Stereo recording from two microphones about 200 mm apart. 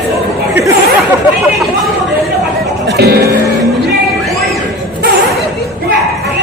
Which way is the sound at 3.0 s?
50° right (ahead or behind).